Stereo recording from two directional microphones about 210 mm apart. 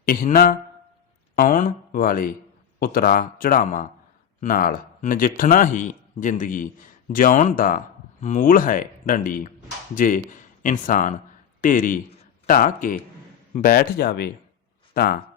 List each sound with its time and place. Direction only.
0.0 s speech: 40° left (ahead or behind)